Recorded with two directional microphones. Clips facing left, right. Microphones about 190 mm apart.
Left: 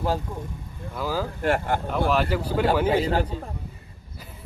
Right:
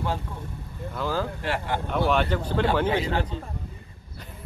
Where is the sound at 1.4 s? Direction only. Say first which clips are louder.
Left 5 dB; 45° left (ahead or behind).